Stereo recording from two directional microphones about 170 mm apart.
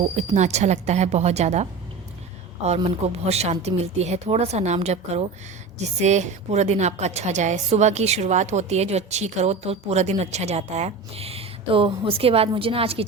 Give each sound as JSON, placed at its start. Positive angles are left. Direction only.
{"t": 0.3, "sound": "a woman's voice", "side_deg": -40}
{"t": 2.6, "sound": "a woman's voice", "side_deg": -35}